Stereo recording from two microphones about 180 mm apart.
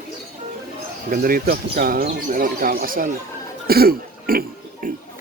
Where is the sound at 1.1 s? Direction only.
55° right (ahead or behind).